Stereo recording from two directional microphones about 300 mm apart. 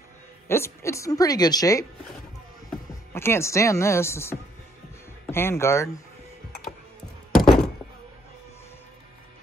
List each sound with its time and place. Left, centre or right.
0.5 s speech: centre
3.1 s speech: centre
7.3 s thunk: centre